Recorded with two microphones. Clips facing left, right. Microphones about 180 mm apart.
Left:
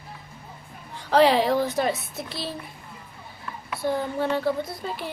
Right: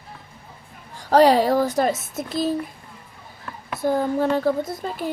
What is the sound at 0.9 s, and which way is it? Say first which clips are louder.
A child's voice: right 3 dB; 45° right (ahead or behind).